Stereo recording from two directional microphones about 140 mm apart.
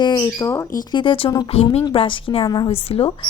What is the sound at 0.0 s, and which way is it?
Speech, 25° left (ahead or behind).